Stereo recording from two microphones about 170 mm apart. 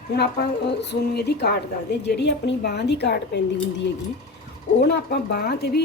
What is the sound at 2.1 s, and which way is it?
A woman's voice, 90° left.